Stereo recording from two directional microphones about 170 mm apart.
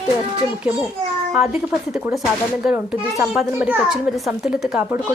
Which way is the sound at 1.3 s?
Centre (ahead or behind).